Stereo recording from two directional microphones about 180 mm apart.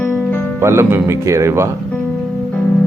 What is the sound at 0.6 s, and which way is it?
Speech, 15° right (ahead or behind).